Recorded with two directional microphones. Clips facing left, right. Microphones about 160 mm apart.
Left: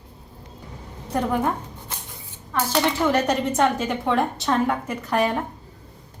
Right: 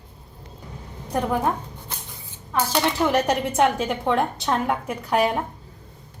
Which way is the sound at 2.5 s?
10° right (ahead or behind).